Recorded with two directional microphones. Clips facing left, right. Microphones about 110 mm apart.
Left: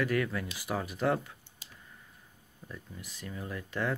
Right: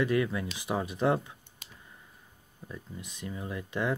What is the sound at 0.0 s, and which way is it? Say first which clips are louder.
Speech: right 3 dB; 20° right (ahead or behind).